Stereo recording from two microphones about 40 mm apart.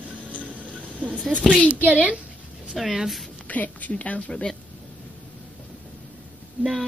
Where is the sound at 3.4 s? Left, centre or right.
Left.